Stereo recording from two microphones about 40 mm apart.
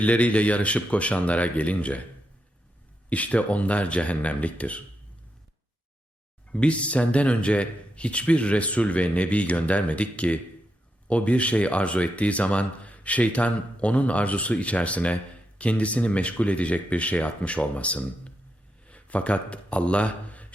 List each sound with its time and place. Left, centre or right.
0.0 s speech: left
3.1 s speech: left
6.5 s speech: left